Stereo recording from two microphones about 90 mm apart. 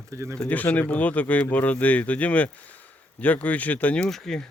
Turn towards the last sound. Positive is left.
turn(degrees=5)  # may be behind; listen again after turning